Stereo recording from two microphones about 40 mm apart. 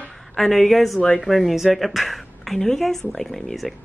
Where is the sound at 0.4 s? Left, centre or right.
Centre.